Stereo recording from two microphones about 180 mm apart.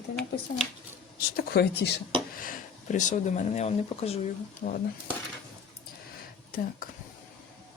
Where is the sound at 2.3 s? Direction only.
50° left (ahead or behind).